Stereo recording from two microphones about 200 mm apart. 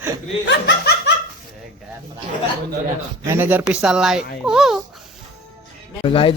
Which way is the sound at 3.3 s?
10° right (ahead or behind).